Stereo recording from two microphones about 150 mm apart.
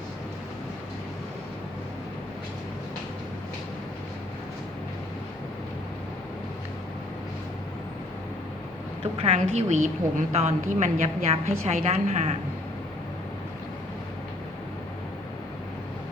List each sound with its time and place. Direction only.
9.1 s a woman's voice: 40° right (ahead or behind)